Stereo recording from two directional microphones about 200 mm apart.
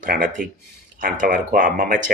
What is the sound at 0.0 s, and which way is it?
Speech, 45° right (ahead or behind).